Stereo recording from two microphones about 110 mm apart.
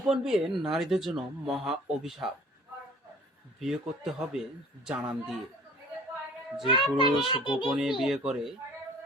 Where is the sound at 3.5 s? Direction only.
5° right (ahead or behind).